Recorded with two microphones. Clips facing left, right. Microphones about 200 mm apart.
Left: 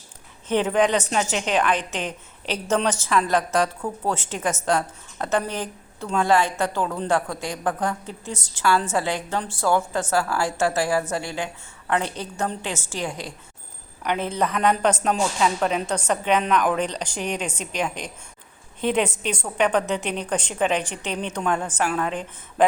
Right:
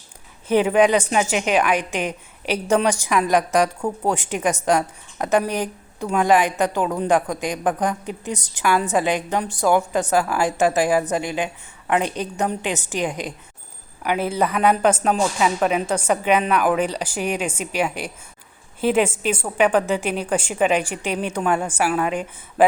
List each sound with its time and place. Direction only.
0.4 s a woman's voice: 10° right (ahead or behind)
14.0 s a woman's voice: 5° right (ahead or behind)